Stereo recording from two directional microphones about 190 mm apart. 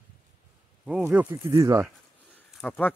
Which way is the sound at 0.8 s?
5° right (ahead or behind).